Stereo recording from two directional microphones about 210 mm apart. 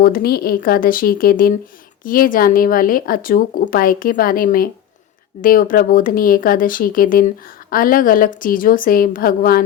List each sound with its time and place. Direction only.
0.0 s a woman's voice: 45° left (ahead or behind)